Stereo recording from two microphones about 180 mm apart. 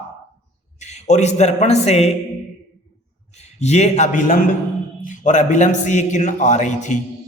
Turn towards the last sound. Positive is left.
turn(degrees=40)  # may be behind; listen again after turning